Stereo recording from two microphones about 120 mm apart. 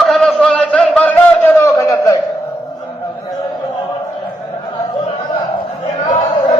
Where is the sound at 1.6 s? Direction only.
25° left (ahead or behind).